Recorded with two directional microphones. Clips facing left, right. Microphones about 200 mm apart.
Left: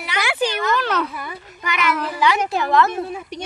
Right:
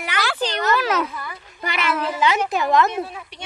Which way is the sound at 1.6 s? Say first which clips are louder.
Left 1 dB; 30° right (ahead or behind).